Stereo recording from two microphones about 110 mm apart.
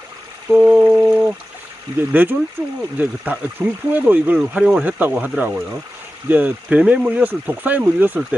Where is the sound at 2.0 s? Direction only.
15° right (ahead or behind).